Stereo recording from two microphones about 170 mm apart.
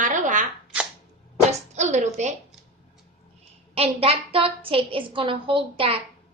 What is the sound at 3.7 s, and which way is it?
A woman's voice, 35° right (ahead or behind).